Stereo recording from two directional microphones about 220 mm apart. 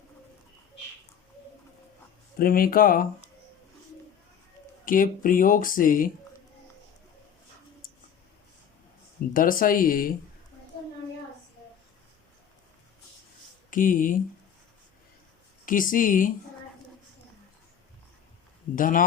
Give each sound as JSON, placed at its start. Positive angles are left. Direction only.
{"t": 2.4, "sound": "speech", "side_deg": 40}
{"t": 4.9, "sound": "speech", "side_deg": 40}
{"t": 9.3, "sound": "speech", "side_deg": 40}
{"t": 13.7, "sound": "speech", "side_deg": 40}
{"t": 15.6, "sound": "speech", "side_deg": 40}
{"t": 18.8, "sound": "speech", "side_deg": 35}